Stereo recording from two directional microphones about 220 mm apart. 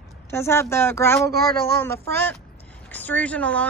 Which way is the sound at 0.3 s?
10° left (ahead or behind).